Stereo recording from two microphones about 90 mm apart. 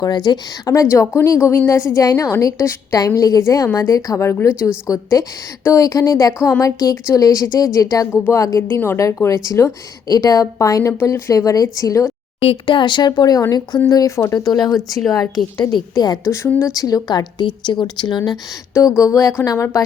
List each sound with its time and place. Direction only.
0.0 s speech: 50° left (ahead or behind)
0.7 s a woman's voice: 35° left (ahead or behind)
4.9 s a woman's voice: 40° left (ahead or behind)
8.6 s a woman's voice: 25° left (ahead or behind)
12.4 s speech: 80° left; by 18.2 s 60° left (ahead or behind)
18.7 s a woman's voice: 35° left (ahead or behind)